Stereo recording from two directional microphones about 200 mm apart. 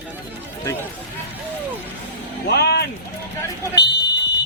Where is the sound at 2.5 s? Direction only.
55° left (ahead or behind).